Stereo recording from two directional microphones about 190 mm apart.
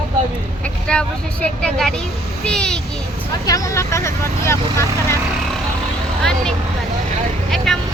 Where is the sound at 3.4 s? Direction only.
20° left (ahead or behind).